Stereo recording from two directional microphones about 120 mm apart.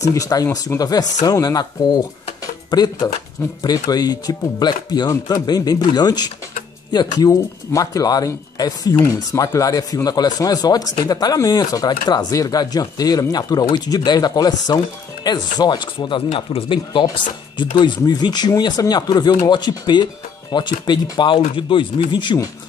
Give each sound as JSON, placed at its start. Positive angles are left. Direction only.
{"t": 0.0, "sound": "speech", "side_deg": 30}
{"t": 2.4, "sound": "a sound", "side_deg": 35}
{"t": 3.6, "sound": "speech", "side_deg": 35}